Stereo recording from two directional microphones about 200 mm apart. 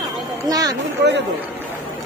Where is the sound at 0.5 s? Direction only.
20° right (ahead or behind).